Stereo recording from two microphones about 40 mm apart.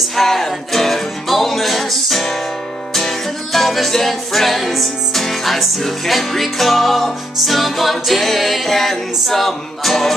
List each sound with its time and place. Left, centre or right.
0.1 s music: centre